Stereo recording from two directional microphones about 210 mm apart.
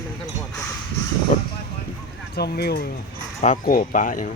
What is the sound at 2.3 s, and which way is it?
Speech, 50° left (ahead or behind).